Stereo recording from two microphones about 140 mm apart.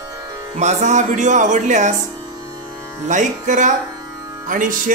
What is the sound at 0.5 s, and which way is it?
Speech, 55° right (ahead or behind).